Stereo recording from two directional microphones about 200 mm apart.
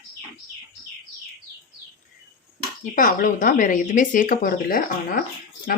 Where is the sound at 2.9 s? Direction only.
40° left (ahead or behind).